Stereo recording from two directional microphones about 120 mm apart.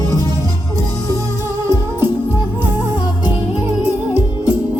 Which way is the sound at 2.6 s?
15° right (ahead or behind).